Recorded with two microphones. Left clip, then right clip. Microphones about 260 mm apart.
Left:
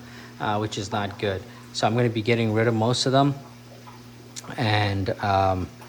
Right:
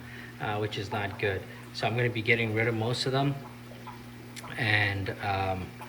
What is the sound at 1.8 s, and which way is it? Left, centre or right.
Speech, left.